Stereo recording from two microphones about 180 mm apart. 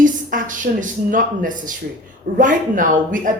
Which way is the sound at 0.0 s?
45° right (ahead or behind).